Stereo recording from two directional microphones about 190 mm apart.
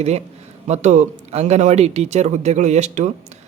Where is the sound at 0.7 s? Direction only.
40° right (ahead or behind).